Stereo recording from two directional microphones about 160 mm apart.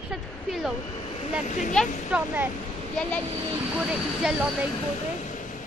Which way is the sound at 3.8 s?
5° right (ahead or behind).